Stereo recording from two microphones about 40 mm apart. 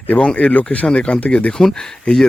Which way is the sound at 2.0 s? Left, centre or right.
Centre.